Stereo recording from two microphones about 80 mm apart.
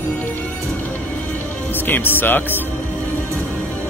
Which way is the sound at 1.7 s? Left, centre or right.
Left.